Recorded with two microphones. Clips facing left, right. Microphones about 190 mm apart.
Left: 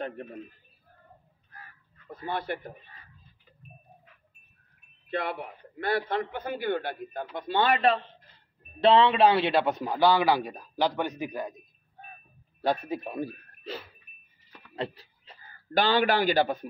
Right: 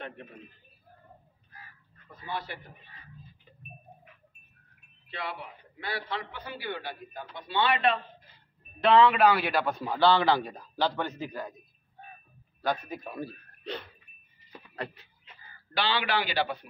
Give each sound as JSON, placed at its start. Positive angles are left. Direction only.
{"t": 2.0, "sound": "a man's voice", "side_deg": 55}
{"t": 5.0, "sound": "a man's voice", "side_deg": 50}
{"t": 8.8, "sound": "a man's voice", "side_deg": 30}
{"t": 12.6, "sound": "speech", "side_deg": 30}
{"t": 13.7, "sound": "a sound", "side_deg": 5}
{"t": 15.0, "sound": "a man's voice", "side_deg": 40}